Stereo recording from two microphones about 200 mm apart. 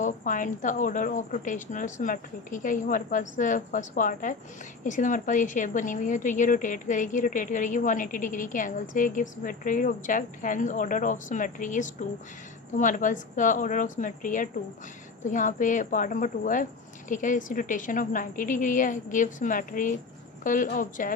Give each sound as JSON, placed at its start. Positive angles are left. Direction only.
{"t": 0.0, "sound": "a woman's voice", "side_deg": 40}